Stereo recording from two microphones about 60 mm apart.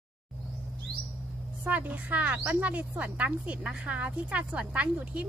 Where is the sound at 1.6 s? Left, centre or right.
Right.